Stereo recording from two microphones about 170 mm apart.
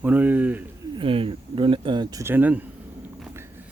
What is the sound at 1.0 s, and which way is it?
Speech, 30° right (ahead or behind).